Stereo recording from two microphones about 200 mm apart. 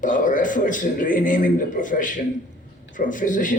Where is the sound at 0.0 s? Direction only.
40° left (ahead or behind).